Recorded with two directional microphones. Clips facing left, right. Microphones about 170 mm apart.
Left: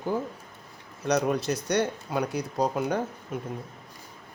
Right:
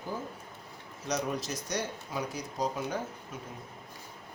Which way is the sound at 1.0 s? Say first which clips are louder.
Left 8 dB; 65° left (ahead or behind).